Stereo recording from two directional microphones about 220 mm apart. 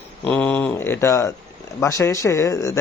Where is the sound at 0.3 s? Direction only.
5° left (ahead or behind).